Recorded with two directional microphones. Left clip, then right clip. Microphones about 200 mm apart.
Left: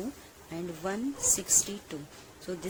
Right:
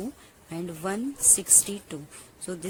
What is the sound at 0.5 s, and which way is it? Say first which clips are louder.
Speech: right 3 dB; 25° right (ahead or behind).